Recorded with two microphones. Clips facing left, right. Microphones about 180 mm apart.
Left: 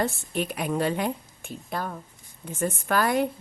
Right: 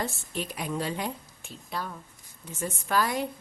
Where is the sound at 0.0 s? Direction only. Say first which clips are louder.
Left 6 dB; 60° left (ahead or behind).